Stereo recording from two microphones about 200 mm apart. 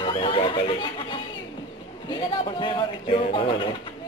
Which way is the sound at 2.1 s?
25° left (ahead or behind).